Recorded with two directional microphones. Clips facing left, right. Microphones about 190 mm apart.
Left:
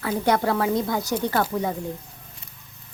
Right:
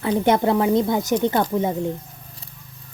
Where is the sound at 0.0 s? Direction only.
20° right (ahead or behind).